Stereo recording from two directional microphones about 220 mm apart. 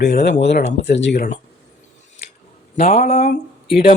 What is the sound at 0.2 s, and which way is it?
Speech, 55° left (ahead or behind).